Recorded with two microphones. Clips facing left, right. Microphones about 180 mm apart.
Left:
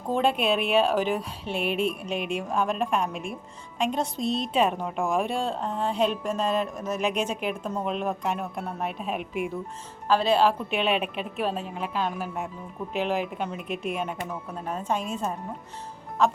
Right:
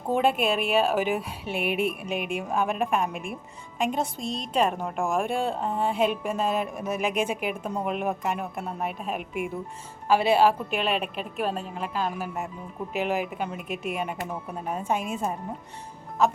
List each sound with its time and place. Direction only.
0.1 s a woman's voice: 5° right (ahead or behind)
2.1 s speech: 55° right (ahead or behind)
2.4 s a woman's voice: 5° right (ahead or behind)